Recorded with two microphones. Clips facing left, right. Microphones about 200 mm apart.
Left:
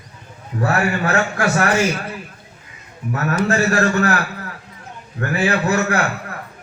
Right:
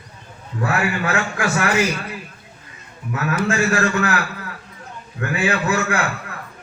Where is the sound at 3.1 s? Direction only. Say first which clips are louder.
Left 2 dB; 40° left (ahead or behind).